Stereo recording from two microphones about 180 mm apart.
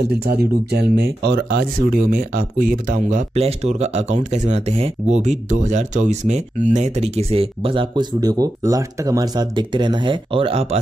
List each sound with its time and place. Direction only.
0.2 s speech: 65° right (ahead or behind); by 10.8 s 35° right (ahead or behind)